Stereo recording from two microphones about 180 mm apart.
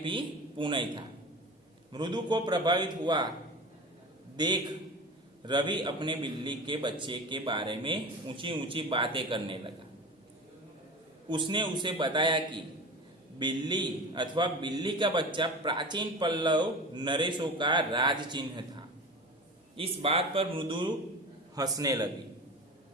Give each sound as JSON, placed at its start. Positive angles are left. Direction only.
{"t": 0.0, "sound": "a man's voice", "side_deg": -25}
{"t": 4.4, "sound": "a man's voice", "side_deg": -25}
{"t": 11.3, "sound": "a man's voice", "side_deg": -25}
{"t": 19.7, "sound": "a man's voice", "side_deg": -30}